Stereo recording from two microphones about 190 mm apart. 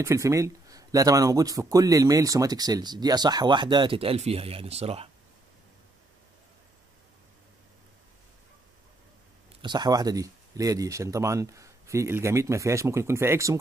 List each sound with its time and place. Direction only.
0.0 s speech: 15° right (ahead or behind); by 5.1 s 30° right (ahead or behind)
9.6 s speech: 25° right (ahead or behind)